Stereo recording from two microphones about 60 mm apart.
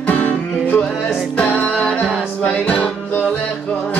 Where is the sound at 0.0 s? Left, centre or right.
Left.